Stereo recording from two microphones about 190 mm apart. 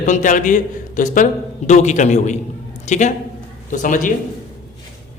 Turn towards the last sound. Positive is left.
turn(degrees=45)  # may be behind; listen again after turning